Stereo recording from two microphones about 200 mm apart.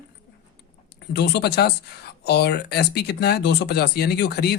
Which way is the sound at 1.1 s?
55° left (ahead or behind).